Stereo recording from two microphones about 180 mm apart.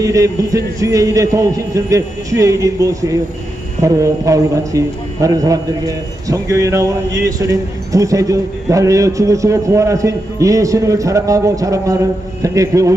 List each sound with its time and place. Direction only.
0.0 s a man's voice: 15° right (ahead or behind)